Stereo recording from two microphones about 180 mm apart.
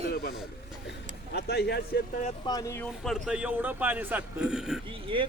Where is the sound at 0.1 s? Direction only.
55° left (ahead or behind).